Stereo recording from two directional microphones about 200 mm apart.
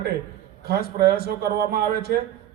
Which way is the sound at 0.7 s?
50° right (ahead or behind).